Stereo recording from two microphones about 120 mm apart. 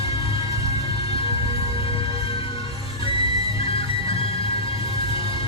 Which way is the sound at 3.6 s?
50° left (ahead or behind).